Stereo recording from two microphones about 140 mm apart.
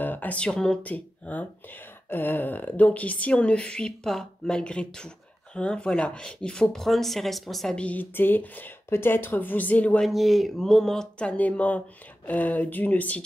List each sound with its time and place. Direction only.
0.0 s a woman's voice: 15° left (ahead or behind)